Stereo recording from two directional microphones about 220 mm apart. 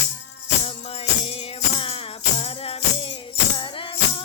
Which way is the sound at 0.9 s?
25° left (ahead or behind).